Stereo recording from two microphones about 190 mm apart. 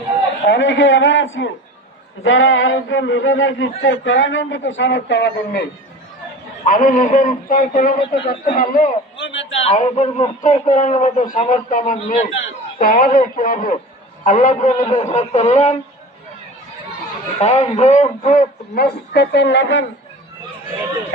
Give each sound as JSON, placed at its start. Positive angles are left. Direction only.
{"t": 0.4, "sound": "a man's voice", "side_deg": 70}
{"t": 6.7, "sound": "a man's voice", "side_deg": 45}
{"t": 7.9, "sound": "speech", "side_deg": 25}
{"t": 8.3, "sound": "a man's voice", "side_deg": 45}
{"t": 9.1, "sound": "a sound", "side_deg": 75}
{"t": 9.6, "sound": "a man's voice", "side_deg": 30}
{"t": 17.4, "sound": "a man's voice", "side_deg": 35}
{"t": 19.1, "sound": "speech", "side_deg": 65}